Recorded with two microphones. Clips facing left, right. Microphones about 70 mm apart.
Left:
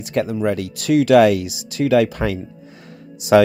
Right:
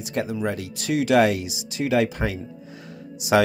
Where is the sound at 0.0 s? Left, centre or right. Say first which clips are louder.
Left 6 dB; left.